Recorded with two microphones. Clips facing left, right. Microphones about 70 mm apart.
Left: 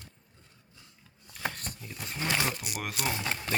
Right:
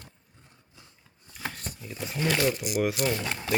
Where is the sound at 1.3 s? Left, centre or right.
Centre.